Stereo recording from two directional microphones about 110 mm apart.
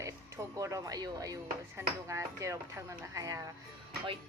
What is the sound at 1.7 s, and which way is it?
Speech, 25° right (ahead or behind).